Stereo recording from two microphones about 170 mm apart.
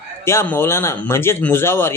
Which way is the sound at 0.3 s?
15° left (ahead or behind).